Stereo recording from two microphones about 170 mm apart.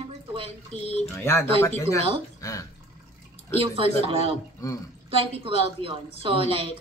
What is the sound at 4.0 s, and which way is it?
Speech, 35° right (ahead or behind).